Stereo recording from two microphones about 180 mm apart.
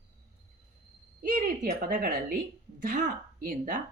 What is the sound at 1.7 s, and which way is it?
Speech, 55° right (ahead or behind).